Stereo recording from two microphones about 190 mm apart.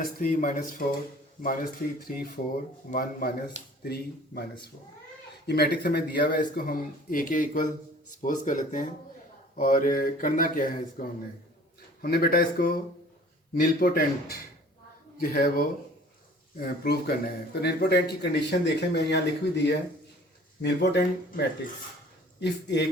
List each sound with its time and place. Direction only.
0.0 s speech: 50° left (ahead or behind)
12.0 s speech: 50° left (ahead or behind)
15.2 s speech: 45° left (ahead or behind); by 22.9 s 65° left (ahead or behind)